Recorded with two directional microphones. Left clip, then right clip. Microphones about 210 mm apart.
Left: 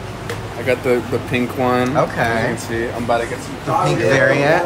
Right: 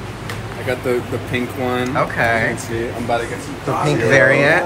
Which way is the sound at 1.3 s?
30° left (ahead or behind).